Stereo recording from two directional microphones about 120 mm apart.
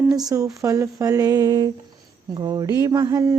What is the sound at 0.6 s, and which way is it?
Mantra, 30° right (ahead or behind).